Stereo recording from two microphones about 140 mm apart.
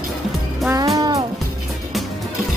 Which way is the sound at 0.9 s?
25° right (ahead or behind).